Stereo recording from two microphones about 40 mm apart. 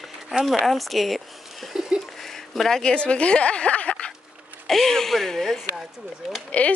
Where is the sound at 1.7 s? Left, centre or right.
Centre.